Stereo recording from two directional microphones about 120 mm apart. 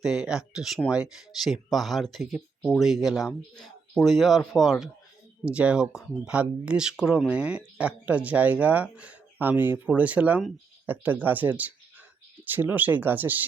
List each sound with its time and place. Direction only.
0.0 s speech: 5° right (ahead or behind)